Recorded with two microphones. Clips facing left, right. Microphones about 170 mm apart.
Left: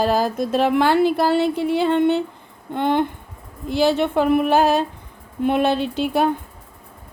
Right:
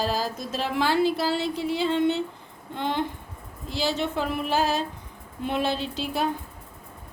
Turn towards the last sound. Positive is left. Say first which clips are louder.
# left 8 dB
turn(degrees=55)  # may be behind; listen again after turning